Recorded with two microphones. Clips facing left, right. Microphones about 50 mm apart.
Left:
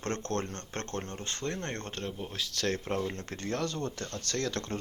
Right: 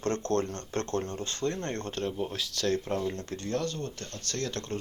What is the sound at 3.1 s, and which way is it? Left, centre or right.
Speech, left.